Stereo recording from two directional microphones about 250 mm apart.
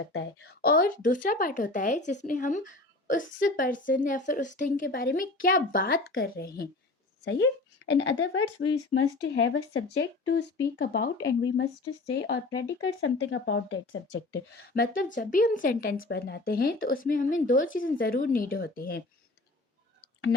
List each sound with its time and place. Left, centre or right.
0.1 s speech: left
14.7 s speech: left